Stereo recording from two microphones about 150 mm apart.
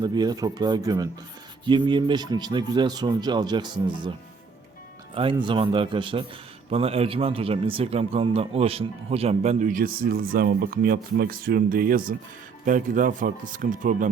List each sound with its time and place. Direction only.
0.0 s speech: 30° right (ahead or behind)
5.1 s speech: 35° right (ahead or behind); by 14.1 s 60° right (ahead or behind)